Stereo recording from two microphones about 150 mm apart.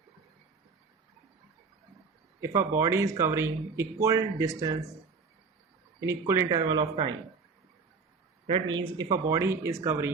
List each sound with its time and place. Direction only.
2.4 s speech: 20° right (ahead or behind)
6.0 s speech: 20° right (ahead or behind)
6.7 s speech: 35° right (ahead or behind)
8.4 s speech: 35° right (ahead or behind); by 10.1 s 15° right (ahead or behind)